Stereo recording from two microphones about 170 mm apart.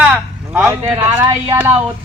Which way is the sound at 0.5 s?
10° right (ahead or behind).